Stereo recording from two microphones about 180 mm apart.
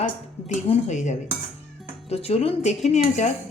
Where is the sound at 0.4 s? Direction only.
40° left (ahead or behind).